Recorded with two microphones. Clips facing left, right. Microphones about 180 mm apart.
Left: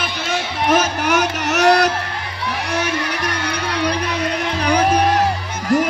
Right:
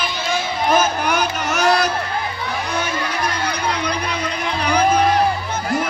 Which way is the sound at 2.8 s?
70° left (ahead or behind).